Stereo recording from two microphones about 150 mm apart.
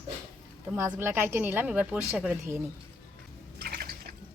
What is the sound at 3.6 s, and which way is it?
Drip, 90° right.